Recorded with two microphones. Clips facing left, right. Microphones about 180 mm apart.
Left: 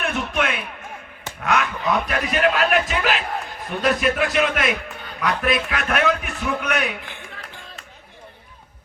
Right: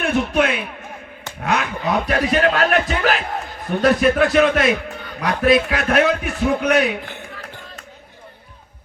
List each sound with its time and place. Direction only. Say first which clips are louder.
0.0 s a man's voice: right 6 dB; 30° right (ahead or behind)
4.5 s a man's voice: right 5 dB; 30° right (ahead or behind)